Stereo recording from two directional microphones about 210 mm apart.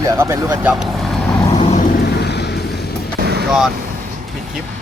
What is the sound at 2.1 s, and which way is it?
Vehicle, 50° left (ahead or behind).